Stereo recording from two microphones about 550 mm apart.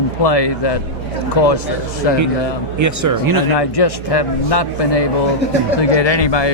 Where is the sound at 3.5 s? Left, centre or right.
Left.